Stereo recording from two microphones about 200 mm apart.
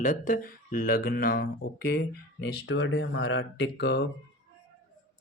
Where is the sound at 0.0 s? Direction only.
40° left (ahead or behind); by 4.1 s 55° left (ahead or behind).